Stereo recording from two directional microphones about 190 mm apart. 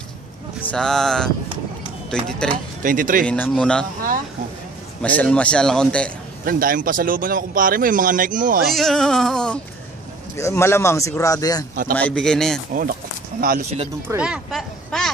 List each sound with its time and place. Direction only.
0.7 s a man's voice: 5° left (ahead or behind)
2.8 s speech: 45° right (ahead or behind)
3.3 s speech: 10° left (ahead or behind)
5.0 s a man's voice: 5° left (ahead or behind)
6.4 s speech: 50° right (ahead or behind)
8.7 s a man's voice: centre (ahead or behind)
10.3 s speech: 15° left (ahead or behind)
11.9 s a man's voice: 5° left (ahead or behind)
13.4 s speech: 50° right (ahead or behind)
14.0 s speech: 5° right (ahead or behind)